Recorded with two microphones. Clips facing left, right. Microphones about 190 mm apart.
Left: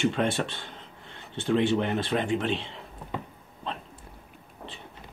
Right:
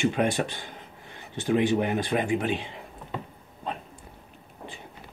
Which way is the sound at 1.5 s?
10° right (ahead or behind).